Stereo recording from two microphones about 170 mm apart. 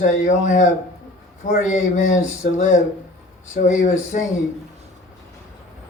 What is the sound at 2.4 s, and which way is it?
Speech, 50° left (ahead or behind).